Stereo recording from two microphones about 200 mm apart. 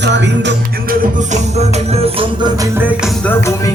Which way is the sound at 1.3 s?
30° right (ahead or behind).